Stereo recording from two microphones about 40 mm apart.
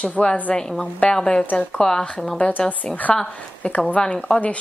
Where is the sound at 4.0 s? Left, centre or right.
Left.